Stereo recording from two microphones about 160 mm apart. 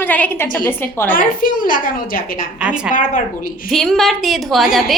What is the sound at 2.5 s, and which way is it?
Speech, 5° right (ahead or behind).